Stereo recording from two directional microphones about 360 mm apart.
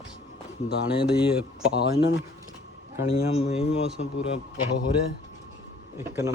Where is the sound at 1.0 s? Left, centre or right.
Centre.